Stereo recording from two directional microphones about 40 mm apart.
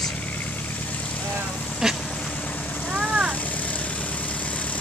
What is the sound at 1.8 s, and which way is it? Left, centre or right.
Duck, centre.